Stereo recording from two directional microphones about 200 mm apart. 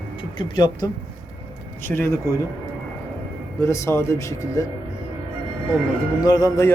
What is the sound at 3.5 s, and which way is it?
Speech, 15° left (ahead or behind).